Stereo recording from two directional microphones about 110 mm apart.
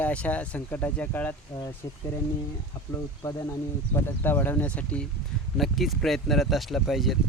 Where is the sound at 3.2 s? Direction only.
35° left (ahead or behind).